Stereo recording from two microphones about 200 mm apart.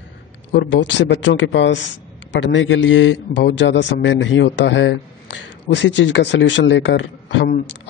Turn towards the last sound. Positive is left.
turn(degrees=65)  # may be behind; listen again after turning